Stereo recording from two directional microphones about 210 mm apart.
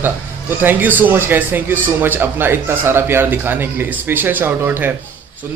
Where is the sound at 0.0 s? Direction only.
10° right (ahead or behind).